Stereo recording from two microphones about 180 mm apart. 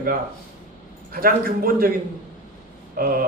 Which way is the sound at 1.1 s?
55° right (ahead or behind).